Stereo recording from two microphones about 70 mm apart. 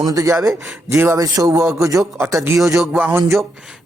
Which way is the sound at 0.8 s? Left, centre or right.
Right.